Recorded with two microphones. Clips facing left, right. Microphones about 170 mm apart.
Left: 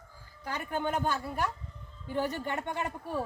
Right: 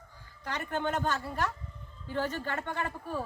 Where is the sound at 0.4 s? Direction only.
10° left (ahead or behind).